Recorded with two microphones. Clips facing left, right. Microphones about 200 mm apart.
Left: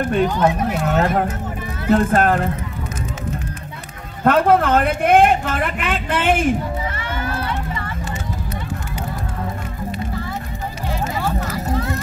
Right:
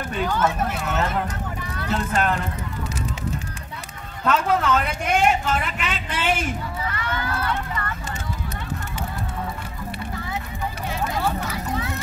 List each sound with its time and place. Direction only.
0.2 s speech: 20° left (ahead or behind)
0.7 s speech: 40° left (ahead or behind)
1.9 s speech: 50° left (ahead or behind)
4.2 s a man's voice: 55° left (ahead or behind)
6.9 s run: 25° left (ahead or behind)
11.1 s vehicle: centre (ahead or behind)
11.7 s music: centre (ahead or behind)